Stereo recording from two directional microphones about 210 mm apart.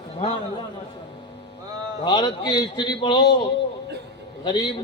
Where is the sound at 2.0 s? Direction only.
20° left (ahead or behind).